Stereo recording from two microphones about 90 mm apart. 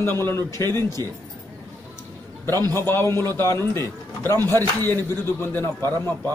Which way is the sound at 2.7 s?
25° left (ahead or behind).